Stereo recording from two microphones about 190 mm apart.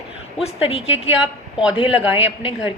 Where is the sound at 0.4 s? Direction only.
30° left (ahead or behind).